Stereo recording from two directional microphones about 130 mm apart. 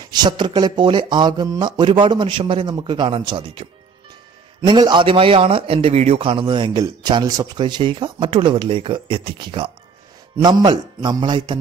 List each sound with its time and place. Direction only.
0.0 s a man's voice: 35° right (ahead or behind)